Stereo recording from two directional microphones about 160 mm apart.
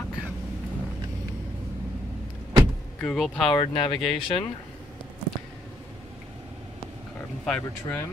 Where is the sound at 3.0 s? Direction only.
Centre (ahead or behind).